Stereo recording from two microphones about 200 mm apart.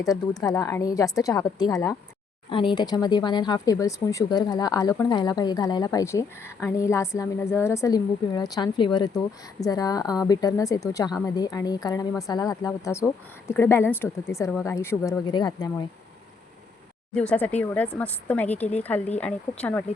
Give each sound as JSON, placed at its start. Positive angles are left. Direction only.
{"t": 0.0, "sound": "a woman's voice", "side_deg": 15}
{"t": 17.2, "sound": "a woman's voice", "side_deg": 5}